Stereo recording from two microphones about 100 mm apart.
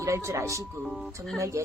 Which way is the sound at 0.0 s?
30° right (ahead or behind).